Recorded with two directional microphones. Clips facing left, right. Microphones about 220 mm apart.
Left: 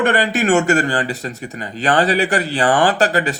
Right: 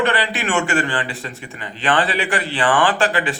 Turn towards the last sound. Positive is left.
turn(degrees=40)  # may be behind; listen again after turning